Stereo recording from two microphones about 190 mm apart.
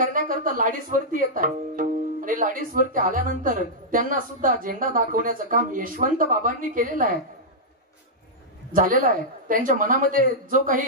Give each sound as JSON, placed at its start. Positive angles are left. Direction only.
{"t": 0.1, "sound": "speech", "side_deg": -45}
{"t": 8.7, "sound": "speech", "side_deg": -45}